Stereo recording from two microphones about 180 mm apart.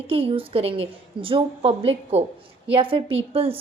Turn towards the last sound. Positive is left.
turn(degrees=-30)  # may be behind; listen again after turning